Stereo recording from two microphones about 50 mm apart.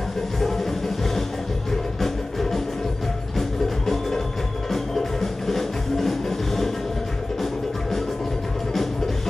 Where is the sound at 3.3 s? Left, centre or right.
Centre.